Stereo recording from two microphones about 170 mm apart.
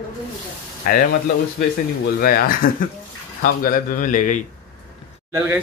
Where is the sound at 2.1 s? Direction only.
55° left (ahead or behind).